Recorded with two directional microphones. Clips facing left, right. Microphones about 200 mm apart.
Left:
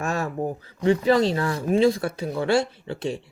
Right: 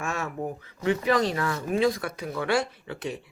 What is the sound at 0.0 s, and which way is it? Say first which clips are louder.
Speech: left 5 dB; 35° left (ahead or behind).